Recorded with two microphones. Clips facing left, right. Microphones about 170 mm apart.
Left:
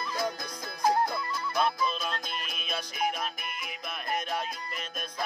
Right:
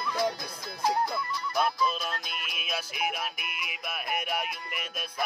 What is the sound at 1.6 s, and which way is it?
Music, 5° right (ahead or behind).